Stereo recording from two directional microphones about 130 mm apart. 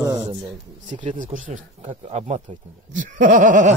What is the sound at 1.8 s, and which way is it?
Speech, 50° right (ahead or behind).